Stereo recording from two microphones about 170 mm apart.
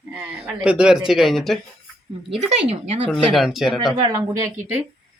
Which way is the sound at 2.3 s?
40° right (ahead or behind).